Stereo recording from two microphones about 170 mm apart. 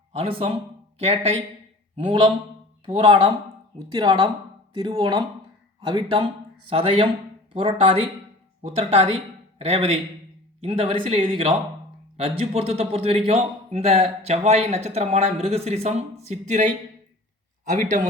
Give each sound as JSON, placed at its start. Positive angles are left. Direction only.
{"t": 0.1, "sound": "a man's voice", "side_deg": -35}
{"t": 17.7, "sound": "speech", "side_deg": -50}